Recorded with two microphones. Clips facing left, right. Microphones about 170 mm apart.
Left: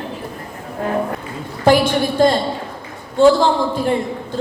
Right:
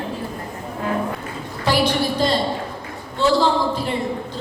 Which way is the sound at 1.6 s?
50° left (ahead or behind).